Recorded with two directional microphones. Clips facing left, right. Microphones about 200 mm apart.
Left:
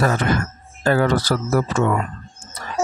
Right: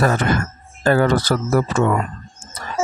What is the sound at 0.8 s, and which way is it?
Speech, 50° right (ahead or behind).